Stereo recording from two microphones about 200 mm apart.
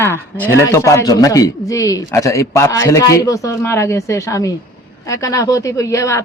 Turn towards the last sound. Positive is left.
turn(degrees=15)  # may be behind; listen again after turning